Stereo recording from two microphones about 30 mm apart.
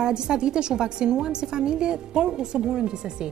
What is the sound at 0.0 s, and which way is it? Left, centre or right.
A woman's voice, right.